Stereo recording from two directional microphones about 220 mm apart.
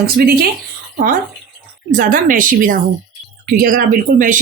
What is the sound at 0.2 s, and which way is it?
Speech, 45° right (ahead or behind).